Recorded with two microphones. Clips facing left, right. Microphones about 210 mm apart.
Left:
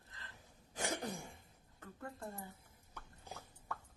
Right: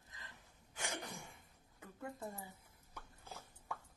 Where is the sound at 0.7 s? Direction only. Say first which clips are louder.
Left 6 dB; 35° left (ahead or behind).